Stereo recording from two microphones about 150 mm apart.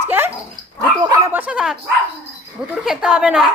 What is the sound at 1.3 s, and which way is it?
A woman's voice, 10° right (ahead or behind).